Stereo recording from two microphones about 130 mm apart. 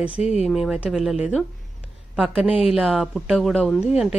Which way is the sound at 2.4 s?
45° left (ahead or behind).